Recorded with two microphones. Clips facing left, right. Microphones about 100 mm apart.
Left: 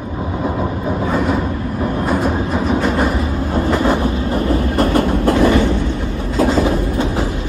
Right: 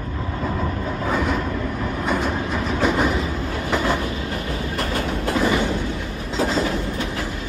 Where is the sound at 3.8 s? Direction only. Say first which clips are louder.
Left 7 dB; 35° left (ahead or behind).